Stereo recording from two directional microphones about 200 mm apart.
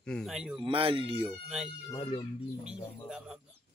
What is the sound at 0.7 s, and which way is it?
Speech, 25° right (ahead or behind).